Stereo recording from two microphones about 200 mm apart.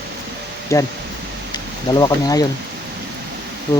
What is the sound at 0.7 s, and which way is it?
Speech, 15° left (ahead or behind).